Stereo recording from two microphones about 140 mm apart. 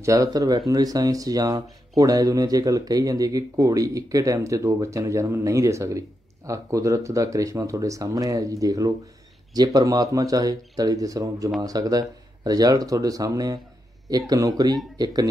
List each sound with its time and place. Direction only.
0.0 s speech: 25° right (ahead or behind)